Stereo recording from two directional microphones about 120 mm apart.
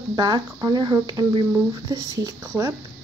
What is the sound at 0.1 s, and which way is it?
Speech, 30° right (ahead or behind).